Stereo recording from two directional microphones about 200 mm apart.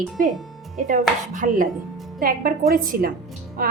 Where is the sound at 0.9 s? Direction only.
40° right (ahead or behind).